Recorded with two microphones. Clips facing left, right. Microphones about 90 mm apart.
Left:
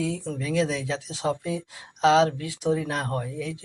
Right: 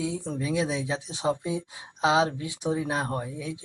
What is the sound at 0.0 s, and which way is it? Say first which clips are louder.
Speech: left 1 dB; 20° right (ahead or behind).